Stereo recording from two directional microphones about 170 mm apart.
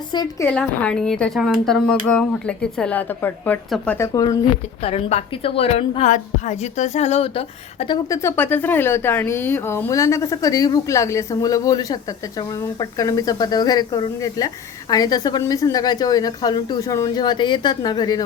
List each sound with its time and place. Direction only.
0.1 s a woman's voice: 25° left (ahead or behind)
0.4 s speech: 5° left (ahead or behind)
4.8 s a woman's voice: 35° left (ahead or behind)
8.1 s speech: 15° left (ahead or behind)